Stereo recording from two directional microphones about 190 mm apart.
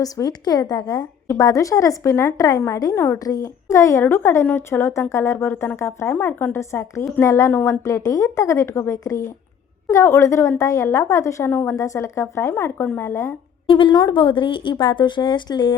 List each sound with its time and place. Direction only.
0.0 s a woman's voice: 20° left (ahead or behind)
13.7 s speech: 25° left (ahead or behind)